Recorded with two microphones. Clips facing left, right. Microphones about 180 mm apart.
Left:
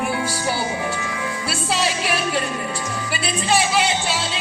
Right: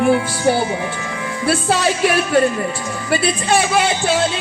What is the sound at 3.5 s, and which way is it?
Speech, 55° right (ahead or behind).